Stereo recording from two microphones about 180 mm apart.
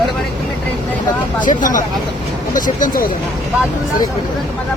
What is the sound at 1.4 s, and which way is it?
Speech, 45° left (ahead or behind).